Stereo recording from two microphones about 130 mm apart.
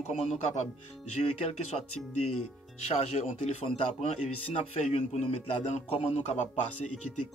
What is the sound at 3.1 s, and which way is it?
A man's voice, 60° left (ahead or behind).